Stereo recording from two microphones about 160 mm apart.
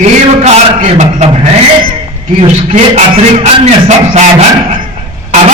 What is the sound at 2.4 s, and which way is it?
Speech, 40° right (ahead or behind).